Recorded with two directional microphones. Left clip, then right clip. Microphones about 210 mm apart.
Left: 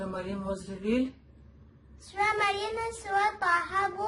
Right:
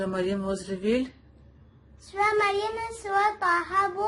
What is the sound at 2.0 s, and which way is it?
Child singing, centre (ahead or behind).